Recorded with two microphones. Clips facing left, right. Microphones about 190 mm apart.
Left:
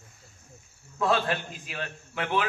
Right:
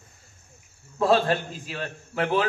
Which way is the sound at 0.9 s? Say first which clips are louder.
Right 5 dB; 35° right (ahead or behind).